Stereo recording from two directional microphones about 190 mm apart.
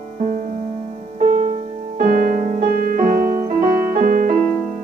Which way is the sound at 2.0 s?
45° right (ahead or behind).